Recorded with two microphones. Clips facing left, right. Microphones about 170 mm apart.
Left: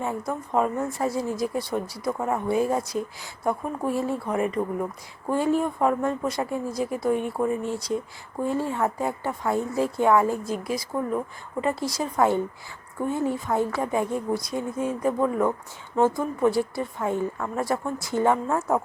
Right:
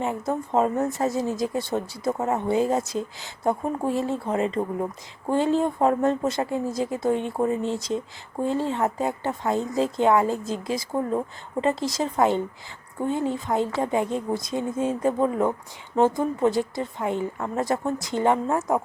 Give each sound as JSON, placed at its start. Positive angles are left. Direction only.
{"t": 0.0, "sound": "speech", "side_deg": -20}